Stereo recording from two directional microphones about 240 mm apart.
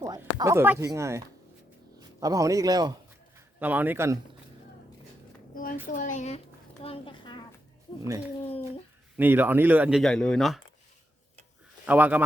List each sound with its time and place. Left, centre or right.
0.0 s a man's voice: centre
5.5 s a woman's voice: left
9.1 s speech: centre
11.9 s speech: centre